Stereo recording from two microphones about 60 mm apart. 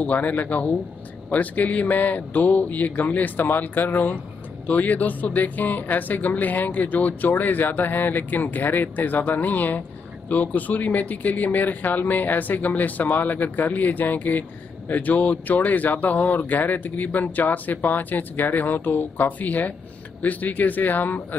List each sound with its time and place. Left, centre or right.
0.0 s speech: left